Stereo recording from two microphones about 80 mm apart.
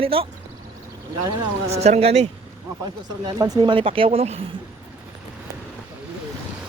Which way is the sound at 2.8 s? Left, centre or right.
Right.